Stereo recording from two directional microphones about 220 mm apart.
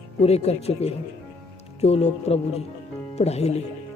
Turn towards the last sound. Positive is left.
turn(degrees=30)  # may be behind; listen again after turning